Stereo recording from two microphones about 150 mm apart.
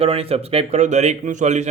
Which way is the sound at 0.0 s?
40° right (ahead or behind).